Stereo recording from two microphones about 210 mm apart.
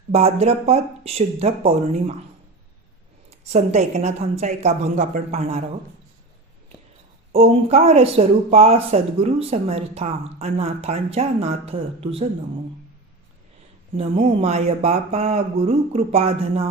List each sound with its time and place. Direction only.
0.1 s speech: 30° right (ahead or behind)
3.2 s speech: 30° right (ahead or behind)
7.3 s speech: 30° right (ahead or behind)
13.9 s speech: 30° right (ahead or behind)